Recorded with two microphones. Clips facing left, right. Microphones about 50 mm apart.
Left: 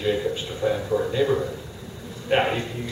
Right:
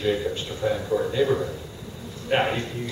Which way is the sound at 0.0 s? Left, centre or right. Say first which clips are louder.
Left 1 dB; centre.